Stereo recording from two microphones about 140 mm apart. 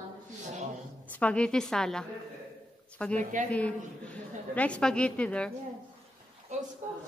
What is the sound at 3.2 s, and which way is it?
Speech, 60° right (ahead or behind).